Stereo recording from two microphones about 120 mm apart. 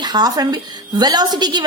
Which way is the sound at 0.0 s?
35° right (ahead or behind).